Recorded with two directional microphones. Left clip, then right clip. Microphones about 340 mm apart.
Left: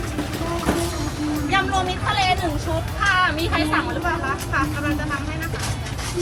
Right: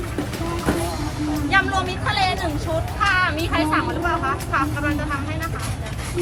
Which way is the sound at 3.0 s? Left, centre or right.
Centre.